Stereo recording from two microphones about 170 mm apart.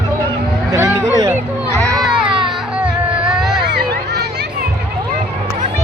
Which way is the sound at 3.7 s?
70° right (ahead or behind).